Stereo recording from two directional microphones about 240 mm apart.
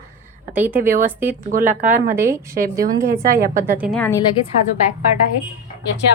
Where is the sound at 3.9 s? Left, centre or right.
Centre.